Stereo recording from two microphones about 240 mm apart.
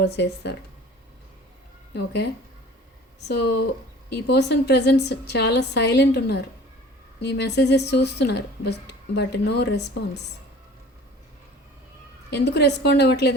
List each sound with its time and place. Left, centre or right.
0.0 s a woman's voice: left
1.9 s a woman's voice: left
12.3 s a woman's voice: left